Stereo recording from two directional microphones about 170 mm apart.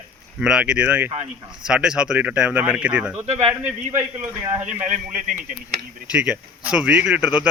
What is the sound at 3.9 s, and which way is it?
Speech, 15° right (ahead or behind).